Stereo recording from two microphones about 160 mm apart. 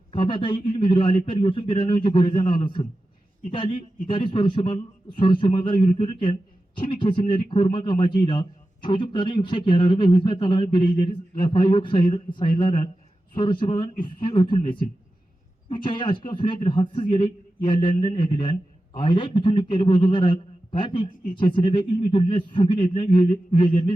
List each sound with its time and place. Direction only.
0.1 s speech: 30° left (ahead or behind)